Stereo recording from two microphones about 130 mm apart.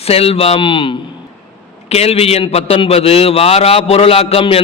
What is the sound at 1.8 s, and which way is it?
A man's voice, 50° left (ahead or behind).